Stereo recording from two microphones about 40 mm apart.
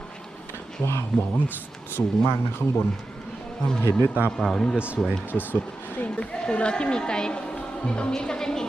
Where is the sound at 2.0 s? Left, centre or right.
Left.